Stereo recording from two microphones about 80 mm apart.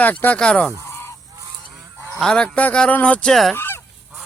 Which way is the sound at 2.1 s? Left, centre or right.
Centre.